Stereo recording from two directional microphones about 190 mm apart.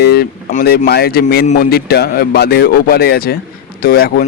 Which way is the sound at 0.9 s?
55° left (ahead or behind).